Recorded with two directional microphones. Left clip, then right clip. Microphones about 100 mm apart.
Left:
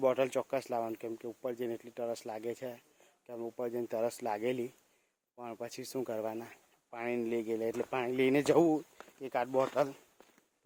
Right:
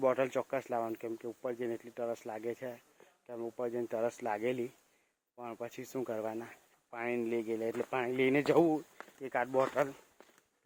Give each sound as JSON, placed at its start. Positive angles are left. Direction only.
{"t": 0.0, "sound": "speech", "side_deg": 10}
{"t": 0.9, "sound": "speech", "side_deg": 20}
{"t": 6.0, "sound": "speech", "side_deg": 15}
{"t": 6.9, "sound": "speech", "side_deg": 30}
{"t": 9.0, "sound": "a sound", "side_deg": 10}
{"t": 9.5, "sound": "speech", "side_deg": 5}